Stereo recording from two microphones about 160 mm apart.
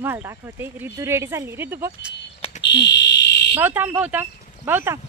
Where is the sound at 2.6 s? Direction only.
90° left.